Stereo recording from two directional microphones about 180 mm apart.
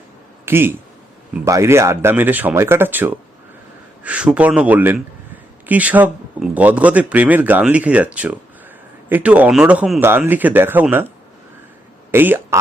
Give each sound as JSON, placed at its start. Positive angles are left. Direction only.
{"t": 0.4, "sound": "speech", "side_deg": -10}
{"t": 12.1, "sound": "speech", "side_deg": -10}